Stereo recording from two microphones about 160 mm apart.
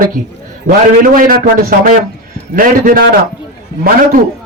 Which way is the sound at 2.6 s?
60° right (ahead or behind).